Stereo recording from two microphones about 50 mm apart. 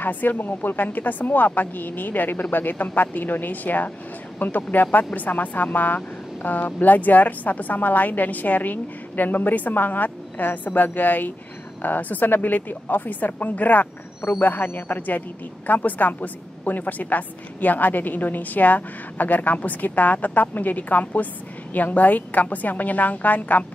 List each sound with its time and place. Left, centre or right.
0.0 s speech: left